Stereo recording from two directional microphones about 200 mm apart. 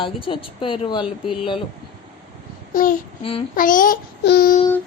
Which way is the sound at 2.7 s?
45° left (ahead or behind).